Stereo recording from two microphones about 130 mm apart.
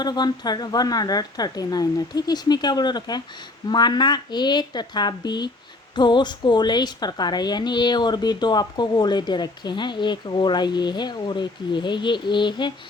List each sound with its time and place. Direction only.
0.0 s a woman's voice: 35° left (ahead or behind)